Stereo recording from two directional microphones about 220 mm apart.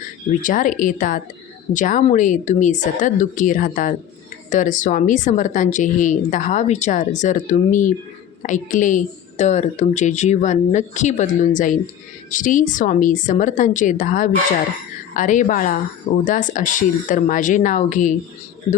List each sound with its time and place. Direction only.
0.4 s a woman's voice: 35° left (ahead or behind)